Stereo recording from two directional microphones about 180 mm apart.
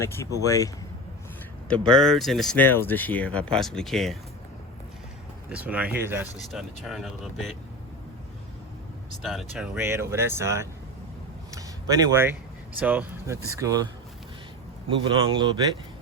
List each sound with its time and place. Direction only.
0.0 s speech: 15° left (ahead or behind)
1.6 s speech: 5° left (ahead or behind)
5.5 s speech: 10° right (ahead or behind)
6.8 s speech: centre (ahead or behind)
9.2 s speech: centre (ahead or behind)
9.7 s speech: 15° right (ahead or behind)
14.8 s speech: 25° right (ahead or behind)